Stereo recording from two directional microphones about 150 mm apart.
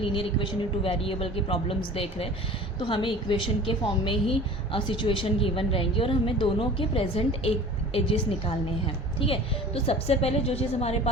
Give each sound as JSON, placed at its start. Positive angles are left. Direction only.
{"t": 0.0, "sound": "a woman's voice", "side_deg": 35}